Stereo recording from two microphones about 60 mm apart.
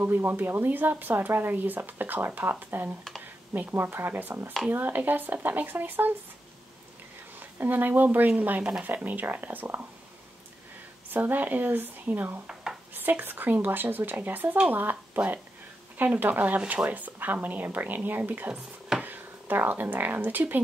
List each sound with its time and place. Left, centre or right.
0.0 s speech: right
7.3 s speech: right
11.1 s speech: right
18.5 s a sound: centre
19.0 s speech: right